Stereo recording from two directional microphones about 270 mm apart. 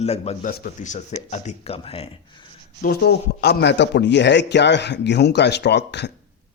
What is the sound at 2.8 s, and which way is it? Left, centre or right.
Speech, left.